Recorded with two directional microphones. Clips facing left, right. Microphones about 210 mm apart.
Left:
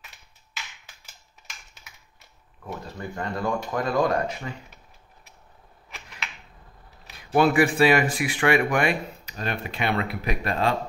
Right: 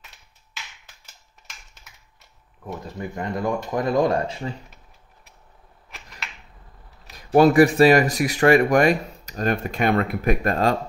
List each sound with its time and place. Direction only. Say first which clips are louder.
2.6 s speech: right 3 dB; 20° right (ahead or behind)
7.1 s speech: right 5 dB; 40° right (ahead or behind)